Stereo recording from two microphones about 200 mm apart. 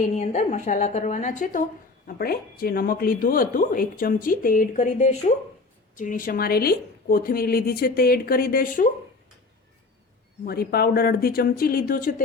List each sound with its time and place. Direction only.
0.2 s a woman's voice: 35° left (ahead or behind)
10.4 s speech: 50° left (ahead or behind)